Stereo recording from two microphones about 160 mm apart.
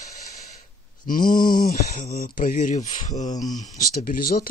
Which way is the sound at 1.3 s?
25° left (ahead or behind).